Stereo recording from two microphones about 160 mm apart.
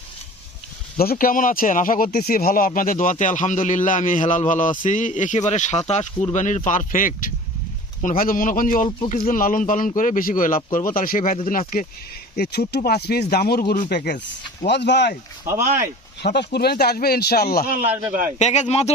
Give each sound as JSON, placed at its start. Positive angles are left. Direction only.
{"t": 0.9, "sound": "speech", "side_deg": 65}
{"t": 12.4, "sound": "speech", "side_deg": 90}
{"t": 13.9, "sound": "speech", "side_deg": 90}
{"t": 15.5, "sound": "speech", "side_deg": -55}
{"t": 16.2, "sound": "speech", "side_deg": 90}
{"t": 18.3, "sound": "speech", "side_deg": 45}